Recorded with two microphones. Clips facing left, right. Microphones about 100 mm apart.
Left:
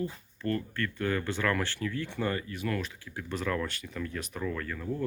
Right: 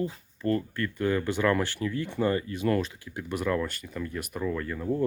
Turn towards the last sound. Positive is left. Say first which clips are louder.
# right 5 dB
turn(degrees=-20)  # may be behind; listen again after turning